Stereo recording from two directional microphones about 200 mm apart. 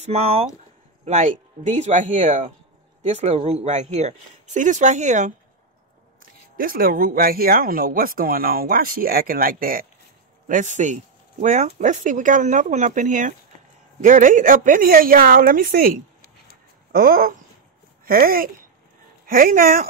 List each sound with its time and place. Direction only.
0.0 s speech: 30° right (ahead or behind)
6.5 s speech: 45° right (ahead or behind)
16.9 s speech: 45° right (ahead or behind)